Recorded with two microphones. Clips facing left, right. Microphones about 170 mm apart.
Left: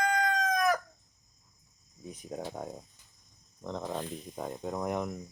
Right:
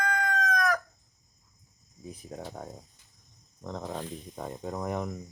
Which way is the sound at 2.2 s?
5° left (ahead or behind).